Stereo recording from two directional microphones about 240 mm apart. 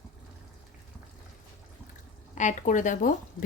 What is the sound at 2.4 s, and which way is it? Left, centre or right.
Speech, left.